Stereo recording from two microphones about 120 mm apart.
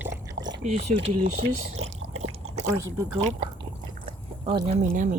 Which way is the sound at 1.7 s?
65° right (ahead or behind).